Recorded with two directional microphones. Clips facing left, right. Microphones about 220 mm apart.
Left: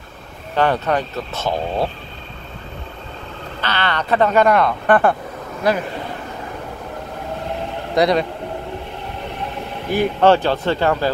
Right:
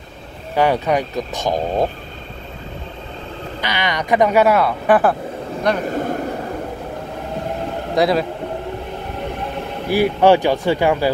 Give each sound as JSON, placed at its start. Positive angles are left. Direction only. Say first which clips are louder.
{"t": 0.6, "sound": "speech", "louder": "right 1 dB", "side_deg": -10}
{"t": 3.6, "sound": "speech", "louder": "even", "side_deg": -15}
{"t": 5.9, "sound": "vehicle", "louder": "right 7 dB", "side_deg": -45}
{"t": 7.9, "sound": "speech", "louder": "even", "side_deg": 0}
{"t": 9.8, "sound": "speech", "louder": "right 1 dB", "side_deg": -10}